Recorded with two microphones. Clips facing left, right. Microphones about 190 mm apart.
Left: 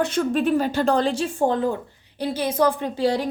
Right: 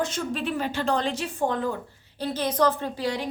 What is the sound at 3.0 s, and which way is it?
Speech, 35° left (ahead or behind).